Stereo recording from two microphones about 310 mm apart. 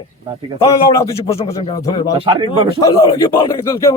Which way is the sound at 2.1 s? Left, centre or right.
Centre.